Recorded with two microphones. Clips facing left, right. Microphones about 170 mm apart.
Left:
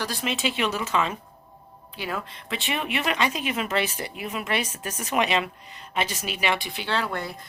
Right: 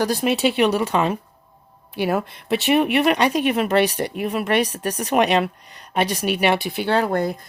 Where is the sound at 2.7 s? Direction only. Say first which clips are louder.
Right 10 dB; 60° right (ahead or behind).